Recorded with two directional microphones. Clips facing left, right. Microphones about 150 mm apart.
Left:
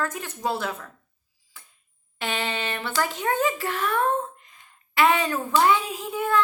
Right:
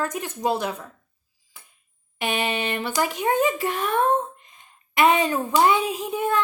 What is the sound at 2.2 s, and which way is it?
Speech, 15° right (ahead or behind).